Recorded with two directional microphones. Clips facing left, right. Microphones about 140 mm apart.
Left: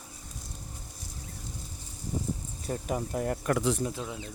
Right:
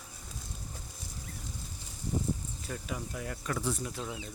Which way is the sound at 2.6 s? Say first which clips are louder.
Left 7 dB; 40° left (ahead or behind).